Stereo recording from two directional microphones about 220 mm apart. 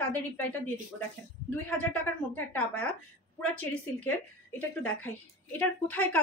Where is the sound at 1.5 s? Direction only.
10° left (ahead or behind).